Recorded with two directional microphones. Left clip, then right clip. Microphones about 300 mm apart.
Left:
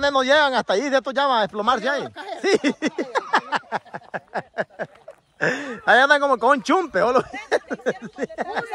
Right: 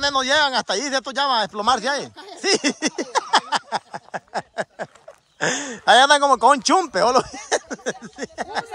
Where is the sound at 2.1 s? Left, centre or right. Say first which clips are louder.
Left 6 dB; left.